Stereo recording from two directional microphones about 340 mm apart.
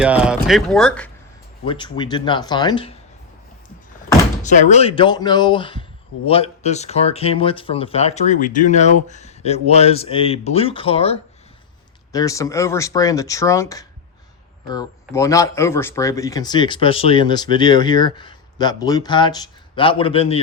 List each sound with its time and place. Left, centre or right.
0.0 s speech: centre
1.6 s speech: centre
4.4 s speech: left